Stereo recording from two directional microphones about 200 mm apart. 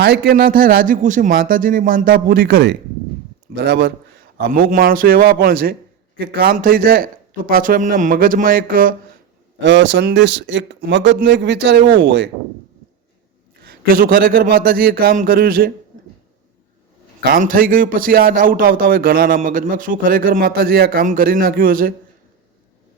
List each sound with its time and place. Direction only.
0.0 s a man's voice: 50° right (ahead or behind)
4.4 s a man's voice: 45° right (ahead or behind)
9.6 s speech: 60° right (ahead or behind)
13.6 s a man's voice: 50° right (ahead or behind)
17.2 s a man's voice: 45° right (ahead or behind)